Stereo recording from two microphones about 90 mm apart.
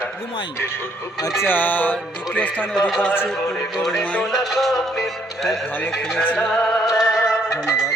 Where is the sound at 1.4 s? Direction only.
20° left (ahead or behind).